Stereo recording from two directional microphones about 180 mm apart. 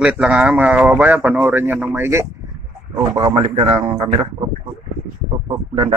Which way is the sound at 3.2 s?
30° right (ahead or behind).